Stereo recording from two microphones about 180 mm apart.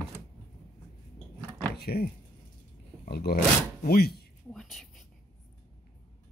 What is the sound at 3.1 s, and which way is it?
Speech, 60° left (ahead or behind).